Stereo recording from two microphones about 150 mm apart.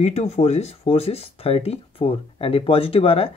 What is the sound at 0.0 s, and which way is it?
Speech, 45° left (ahead or behind).